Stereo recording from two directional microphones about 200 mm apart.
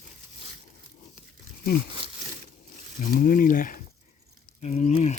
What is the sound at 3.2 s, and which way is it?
Speech, 45° left (ahead or behind).